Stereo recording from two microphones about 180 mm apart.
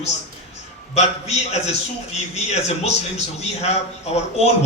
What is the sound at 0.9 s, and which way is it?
A man's voice, 40° left (ahead or behind).